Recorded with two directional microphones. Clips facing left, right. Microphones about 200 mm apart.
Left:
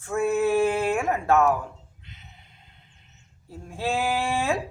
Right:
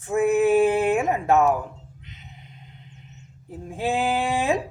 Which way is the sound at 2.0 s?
20° right (ahead or behind).